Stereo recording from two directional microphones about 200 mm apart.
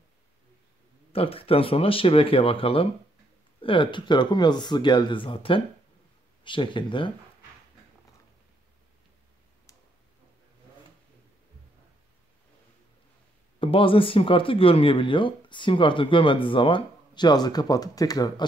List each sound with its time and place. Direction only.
1.1 s speech: 30° left (ahead or behind)
13.6 s speech: 25° left (ahead or behind)